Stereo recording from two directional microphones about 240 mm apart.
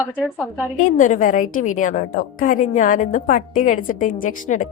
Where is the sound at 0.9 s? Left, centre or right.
Left.